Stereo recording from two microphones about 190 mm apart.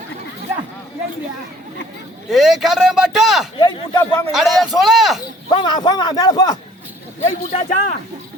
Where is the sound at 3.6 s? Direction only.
20° left (ahead or behind).